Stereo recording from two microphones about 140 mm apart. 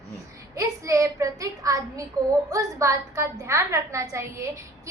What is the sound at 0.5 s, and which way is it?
A woman's voice, 20° right (ahead or behind).